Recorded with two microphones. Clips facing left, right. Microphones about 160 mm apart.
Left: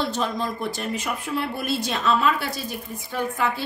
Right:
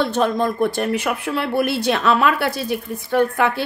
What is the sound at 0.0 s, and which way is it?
A woman's voice, 55° right (ahead or behind).